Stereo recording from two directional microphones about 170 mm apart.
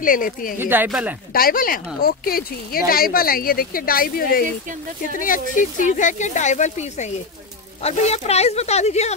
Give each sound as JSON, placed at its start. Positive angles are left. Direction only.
{"t": 0.0, "sound": "speech", "side_deg": 55}
{"t": 0.6, "sound": "speech", "side_deg": -10}
{"t": 1.3, "sound": "speech", "side_deg": 60}